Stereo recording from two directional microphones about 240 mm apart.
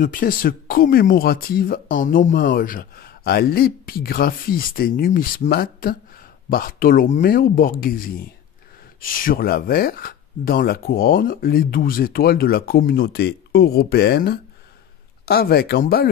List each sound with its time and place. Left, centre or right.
0.0 s speech: left
9.0 s speech: left